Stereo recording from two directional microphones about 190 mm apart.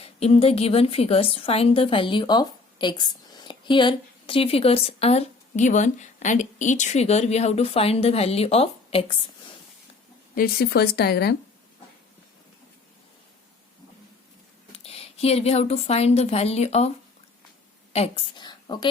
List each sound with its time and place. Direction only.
0.0 s a woman's voice: 30° left (ahead or behind)
10.3 s a woman's voice: 55° left (ahead or behind)
14.7 s a woman's voice: 30° left (ahead or behind)
17.9 s a woman's voice: 30° left (ahead or behind)